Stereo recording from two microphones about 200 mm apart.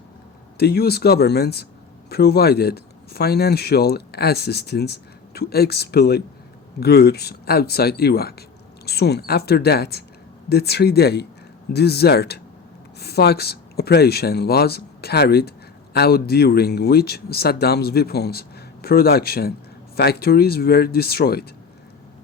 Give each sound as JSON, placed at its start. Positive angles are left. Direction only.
{"t": 0.5, "sound": "speech", "side_deg": 50}